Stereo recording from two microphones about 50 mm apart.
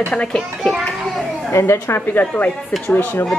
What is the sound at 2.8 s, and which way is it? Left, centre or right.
Speech, left.